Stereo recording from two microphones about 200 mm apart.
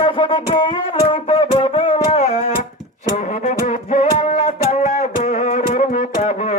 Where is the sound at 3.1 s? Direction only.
35° left (ahead or behind).